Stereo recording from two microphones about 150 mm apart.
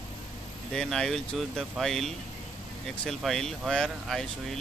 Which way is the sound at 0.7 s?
5° left (ahead or behind).